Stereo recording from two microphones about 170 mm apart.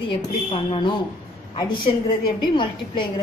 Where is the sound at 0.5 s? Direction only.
30° left (ahead or behind).